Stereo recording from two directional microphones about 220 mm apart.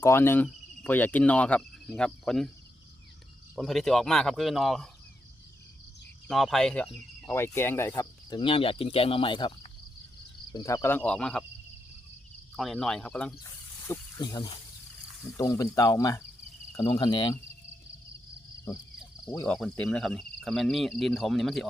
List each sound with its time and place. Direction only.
0.0 s speech: 10° left (ahead or behind)
3.5 s speech: centre (ahead or behind)
6.2 s speech: centre (ahead or behind); by 9.5 s 20° left (ahead or behind)
10.5 s speech: 15° left (ahead or behind)
12.5 s speech: centre (ahead or behind); by 17.4 s 20° left (ahead or behind)
19.2 s speech: 5° left (ahead or behind)